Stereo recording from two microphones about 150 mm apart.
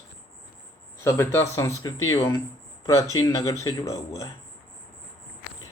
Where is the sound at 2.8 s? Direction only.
20° left (ahead or behind).